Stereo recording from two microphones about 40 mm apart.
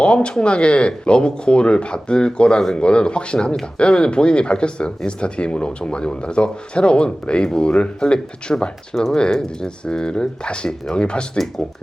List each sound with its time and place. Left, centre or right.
0.0 s speech: left